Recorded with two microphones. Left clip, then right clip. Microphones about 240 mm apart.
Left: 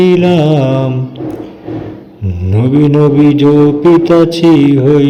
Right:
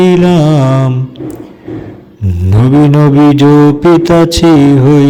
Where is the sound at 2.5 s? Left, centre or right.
Right.